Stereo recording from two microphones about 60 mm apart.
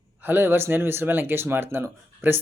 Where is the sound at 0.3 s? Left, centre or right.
Right.